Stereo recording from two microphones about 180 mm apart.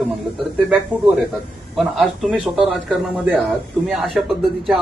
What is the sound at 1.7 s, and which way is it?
A man's voice, centre (ahead or behind).